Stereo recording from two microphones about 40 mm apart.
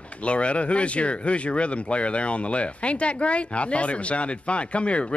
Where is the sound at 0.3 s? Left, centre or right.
Left.